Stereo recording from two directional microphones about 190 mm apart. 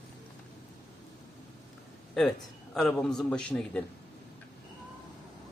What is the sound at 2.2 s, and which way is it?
A man's voice, 5° left (ahead or behind).